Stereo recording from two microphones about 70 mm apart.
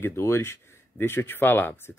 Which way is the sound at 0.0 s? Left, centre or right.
Left.